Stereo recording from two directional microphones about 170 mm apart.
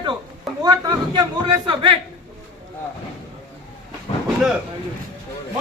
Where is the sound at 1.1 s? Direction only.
25° right (ahead or behind).